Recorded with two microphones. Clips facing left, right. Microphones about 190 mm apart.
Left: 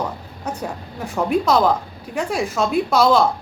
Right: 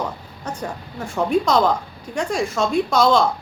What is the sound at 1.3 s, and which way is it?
A woman's voice, 5° left (ahead or behind).